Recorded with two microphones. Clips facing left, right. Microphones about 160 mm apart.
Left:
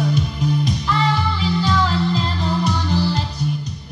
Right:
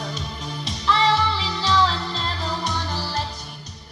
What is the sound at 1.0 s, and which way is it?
Music, 35° right (ahead or behind).